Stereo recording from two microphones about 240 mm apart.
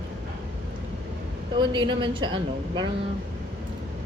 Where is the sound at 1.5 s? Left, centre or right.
Centre.